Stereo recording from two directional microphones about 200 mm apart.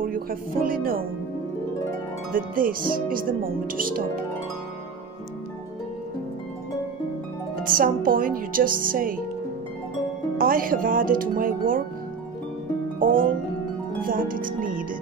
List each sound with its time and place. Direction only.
0.0 s music: 45° right (ahead or behind)
2.3 s speech: 45° right (ahead or behind)
7.6 s speech: 45° right (ahead or behind)
10.3 s speech: 45° right (ahead or behind)
13.0 s speech: 45° right (ahead or behind)